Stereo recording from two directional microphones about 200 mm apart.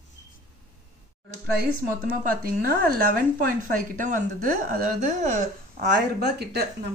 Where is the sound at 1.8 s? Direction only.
50° right (ahead or behind).